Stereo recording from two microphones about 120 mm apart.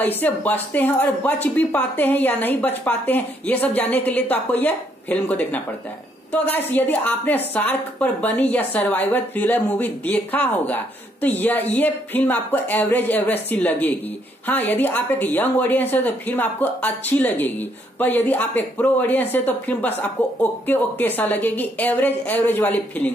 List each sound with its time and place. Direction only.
0.0 s a woman's voice: 15° left (ahead or behind)